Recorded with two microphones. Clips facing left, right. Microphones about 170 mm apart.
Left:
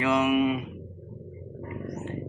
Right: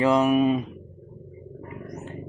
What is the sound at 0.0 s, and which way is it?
Speech, 35° right (ahead or behind).